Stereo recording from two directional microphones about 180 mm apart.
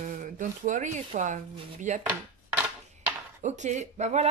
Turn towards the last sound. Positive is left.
turn(degrees=-40)  # may be behind; listen again after turning